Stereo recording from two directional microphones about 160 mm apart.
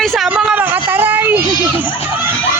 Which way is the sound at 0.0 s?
Centre (ahead or behind).